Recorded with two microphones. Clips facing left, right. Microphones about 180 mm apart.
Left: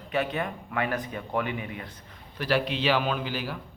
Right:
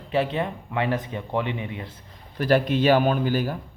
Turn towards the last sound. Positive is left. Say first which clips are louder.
# right 7 dB
turn(degrees=-45)  # may be behind; listen again after turning